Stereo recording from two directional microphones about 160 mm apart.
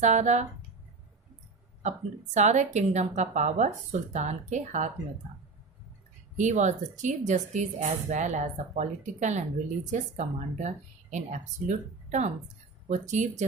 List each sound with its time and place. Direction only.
0.0 s a woman's voice: 45° right (ahead or behind)
1.8 s a woman's voice: 45° right (ahead or behind)
6.3 s a woman's voice: 50° right (ahead or behind)